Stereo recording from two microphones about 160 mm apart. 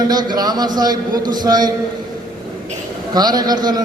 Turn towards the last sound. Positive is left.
turn(degrees=-25)  # may be behind; listen again after turning